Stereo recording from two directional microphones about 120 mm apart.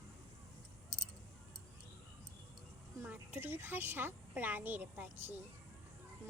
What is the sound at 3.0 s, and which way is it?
A woman's voice, 15° right (ahead or behind).